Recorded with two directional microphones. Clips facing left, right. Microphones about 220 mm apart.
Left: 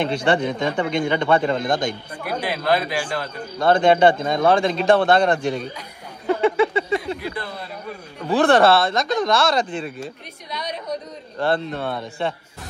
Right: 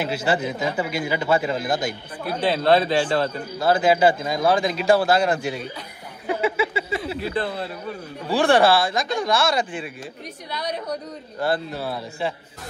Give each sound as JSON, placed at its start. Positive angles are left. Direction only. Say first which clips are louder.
{"t": 0.0, "sound": "a man's voice", "louder": "left 3 dB", "side_deg": -5}
{"t": 2.2, "sound": "speech", "louder": "right 3 dB", "side_deg": -30}
{"t": 3.5, "sound": "speech", "louder": "left 3 dB", "side_deg": -5}
{"t": 6.4, "sound": "a sound", "louder": "left 5 dB", "side_deg": -5}
{"t": 8.4, "sound": "speech", "louder": "left 2 dB", "side_deg": 0}
{"t": 11.4, "sound": "speech", "louder": "left 2 dB", "side_deg": -5}